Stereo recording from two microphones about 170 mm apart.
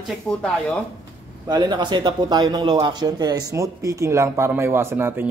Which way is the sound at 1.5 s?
25° right (ahead or behind).